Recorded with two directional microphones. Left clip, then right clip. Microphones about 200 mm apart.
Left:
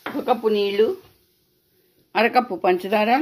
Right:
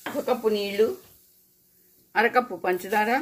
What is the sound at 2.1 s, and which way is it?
A woman's voice, 40° left (ahead or behind).